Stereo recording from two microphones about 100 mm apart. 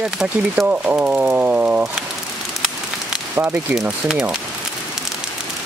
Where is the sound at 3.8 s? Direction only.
10° right (ahead or behind).